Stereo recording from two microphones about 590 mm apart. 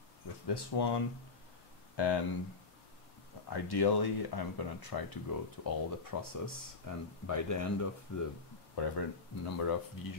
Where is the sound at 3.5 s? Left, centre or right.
Left.